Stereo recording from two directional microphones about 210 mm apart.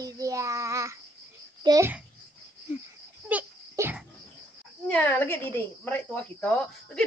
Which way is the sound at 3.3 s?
10° right (ahead or behind).